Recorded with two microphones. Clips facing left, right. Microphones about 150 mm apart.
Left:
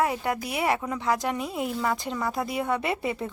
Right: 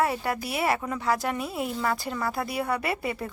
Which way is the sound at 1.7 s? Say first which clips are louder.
Even; 5° left (ahead or behind).